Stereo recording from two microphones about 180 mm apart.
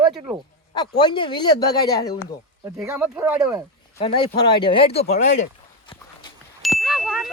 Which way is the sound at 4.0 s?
30° left (ahead or behind).